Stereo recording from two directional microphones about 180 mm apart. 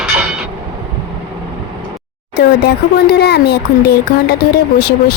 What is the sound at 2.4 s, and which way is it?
Speech, 65° left (ahead or behind).